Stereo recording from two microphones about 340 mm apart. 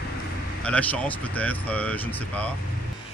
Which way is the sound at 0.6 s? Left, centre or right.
Centre.